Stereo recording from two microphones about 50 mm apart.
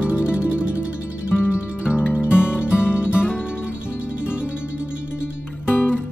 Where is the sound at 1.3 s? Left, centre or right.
Left.